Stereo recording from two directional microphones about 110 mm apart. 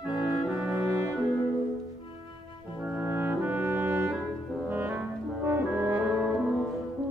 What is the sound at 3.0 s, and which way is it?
French horn, 15° right (ahead or behind).